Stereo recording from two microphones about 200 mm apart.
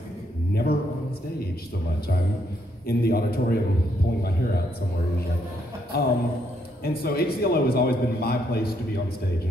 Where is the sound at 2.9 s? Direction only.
50° left (ahead or behind).